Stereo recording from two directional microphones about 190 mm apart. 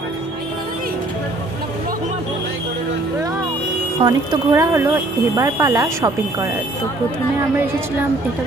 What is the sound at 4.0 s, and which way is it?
Speech, 20° right (ahead or behind).